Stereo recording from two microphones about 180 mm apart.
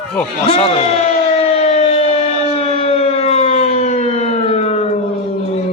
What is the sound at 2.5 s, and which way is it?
Civil defense siren, 35° left (ahead or behind).